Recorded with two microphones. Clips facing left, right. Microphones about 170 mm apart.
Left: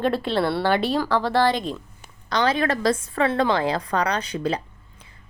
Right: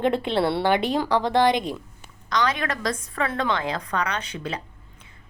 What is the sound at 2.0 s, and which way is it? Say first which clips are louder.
Speech: left 2 dB; 30° left (ahead or behind).